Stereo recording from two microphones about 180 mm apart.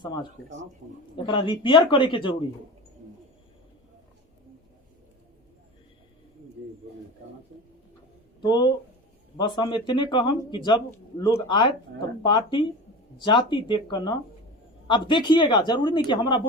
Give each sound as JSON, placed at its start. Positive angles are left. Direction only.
{"t": 1.1, "sound": "speech", "side_deg": 25}
{"t": 8.4, "sound": "speech", "side_deg": 25}